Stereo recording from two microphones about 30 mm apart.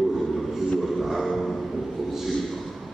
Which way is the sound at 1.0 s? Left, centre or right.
Centre.